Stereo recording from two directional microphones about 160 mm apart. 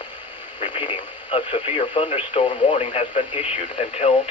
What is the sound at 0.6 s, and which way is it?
Speech, 35° left (ahead or behind).